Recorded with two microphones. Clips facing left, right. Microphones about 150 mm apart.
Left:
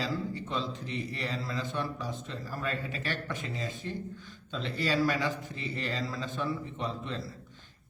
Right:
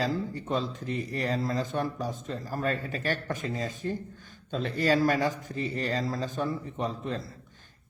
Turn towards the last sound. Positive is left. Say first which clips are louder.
# right 4 dB
turn(degrees=-45)  # may be behind; listen again after turning